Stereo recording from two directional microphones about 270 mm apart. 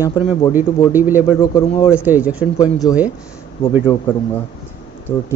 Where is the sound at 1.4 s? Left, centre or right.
Centre.